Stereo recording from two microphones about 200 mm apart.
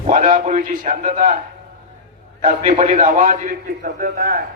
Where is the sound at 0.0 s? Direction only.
40° right (ahead or behind).